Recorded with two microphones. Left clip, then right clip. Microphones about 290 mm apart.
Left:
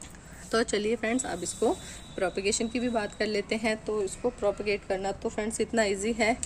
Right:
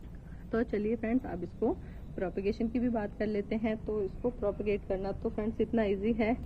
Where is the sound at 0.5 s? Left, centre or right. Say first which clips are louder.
Left 5 dB; centre.